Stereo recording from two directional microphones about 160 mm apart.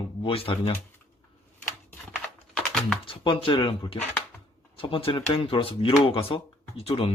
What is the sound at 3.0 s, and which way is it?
Speech, 35° left (ahead or behind).